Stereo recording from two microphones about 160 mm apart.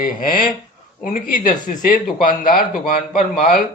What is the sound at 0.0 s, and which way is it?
A man's voice, 60° left (ahead or behind).